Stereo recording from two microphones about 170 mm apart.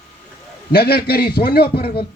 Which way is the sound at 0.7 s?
70° left (ahead or behind).